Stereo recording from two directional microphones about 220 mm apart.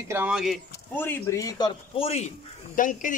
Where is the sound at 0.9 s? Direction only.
10° left (ahead or behind).